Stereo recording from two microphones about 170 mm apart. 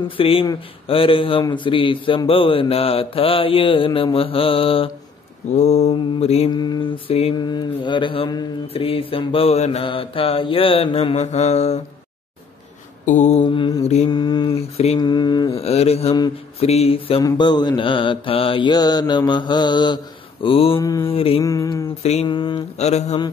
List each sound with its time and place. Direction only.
0.2 s mantra: 35° left (ahead or behind)
6.5 s mantra: 25° left (ahead or behind); by 11.8 s 40° left (ahead or behind)
13.0 s mantra: 45° left (ahead or behind)
13.4 s mantra: 30° left (ahead or behind)
15.6 s mantra: 35° left (ahead or behind)
20.8 s mantra: 20° left (ahead or behind)
21.1 s mantra: 35° left (ahead or behind)
21.4 s mantra: 20° left (ahead or behind)
22.0 s mantra: 40° left (ahead or behind)
22.3 s mantra: 25° left (ahead or behind)
22.8 s mantra: 40° left (ahead or behind)